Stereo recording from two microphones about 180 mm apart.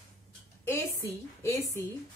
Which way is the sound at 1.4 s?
15° left (ahead or behind).